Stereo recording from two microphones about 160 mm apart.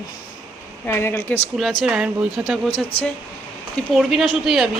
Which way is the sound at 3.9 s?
Centre (ahead or behind).